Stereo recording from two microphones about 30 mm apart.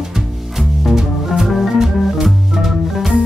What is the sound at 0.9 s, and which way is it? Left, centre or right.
Music, centre.